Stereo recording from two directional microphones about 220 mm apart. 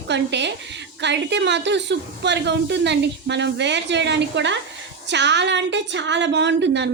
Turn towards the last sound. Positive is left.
turn(degrees=-55)  # may be behind; listen again after turning